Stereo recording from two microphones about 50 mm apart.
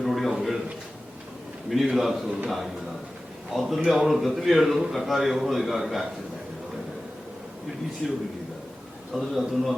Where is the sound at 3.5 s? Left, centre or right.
Centre.